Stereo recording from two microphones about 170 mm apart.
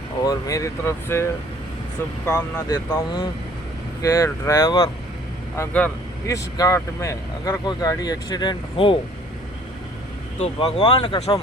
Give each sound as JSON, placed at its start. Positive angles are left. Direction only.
{"t": 0.3, "sound": "speech", "side_deg": 20}
{"t": 5.5, "sound": "speech", "side_deg": 5}
{"t": 6.2, "sound": "speech", "side_deg": 20}
{"t": 10.4, "sound": "speech", "side_deg": 35}